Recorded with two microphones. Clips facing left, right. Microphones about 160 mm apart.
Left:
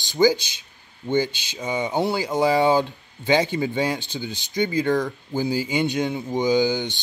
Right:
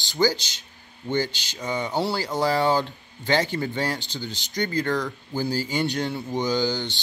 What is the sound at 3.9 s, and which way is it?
Speech, 55° left (ahead or behind).